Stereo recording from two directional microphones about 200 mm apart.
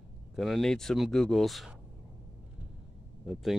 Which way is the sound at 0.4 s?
Centre (ahead or behind).